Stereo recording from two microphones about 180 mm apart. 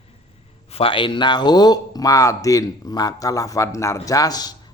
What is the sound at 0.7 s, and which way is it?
A man's voice, 30° left (ahead or behind).